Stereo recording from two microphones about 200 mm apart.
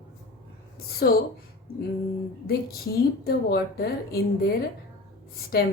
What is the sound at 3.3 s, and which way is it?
Speech, 55° left (ahead or behind).